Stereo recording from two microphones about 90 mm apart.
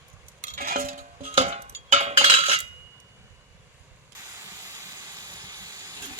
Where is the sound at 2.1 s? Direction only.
90° right.